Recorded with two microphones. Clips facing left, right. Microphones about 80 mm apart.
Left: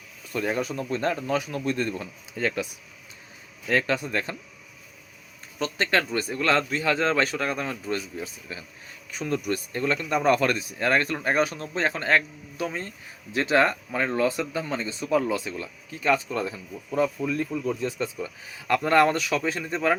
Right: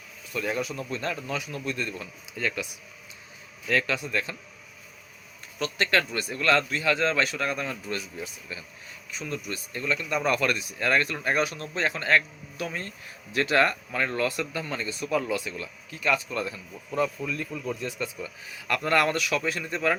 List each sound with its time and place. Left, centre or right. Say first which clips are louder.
0.3 s speech: left 3 dB; left
3.7 s speech: left 2 dB; left
5.5 s speech: left 1 dB; left
9.0 s speech: left 7 dB; left